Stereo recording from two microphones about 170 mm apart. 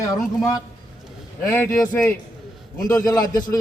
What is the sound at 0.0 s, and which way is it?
A man's voice, 20° left (ahead or behind).